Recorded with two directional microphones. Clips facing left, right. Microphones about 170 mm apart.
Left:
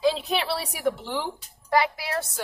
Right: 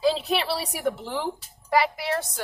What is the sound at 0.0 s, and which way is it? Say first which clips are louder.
A woman's voice: right 1 dB; centre (ahead or behind).